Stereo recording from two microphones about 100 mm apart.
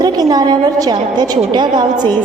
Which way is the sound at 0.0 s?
40° right (ahead or behind).